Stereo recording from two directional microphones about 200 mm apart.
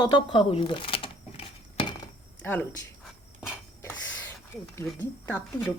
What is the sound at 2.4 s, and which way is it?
Speech, 10° left (ahead or behind).